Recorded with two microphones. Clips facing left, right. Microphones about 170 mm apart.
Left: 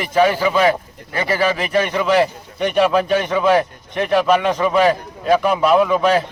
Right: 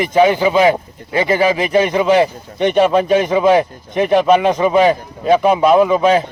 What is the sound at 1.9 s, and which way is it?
A man's voice, centre (ahead or behind).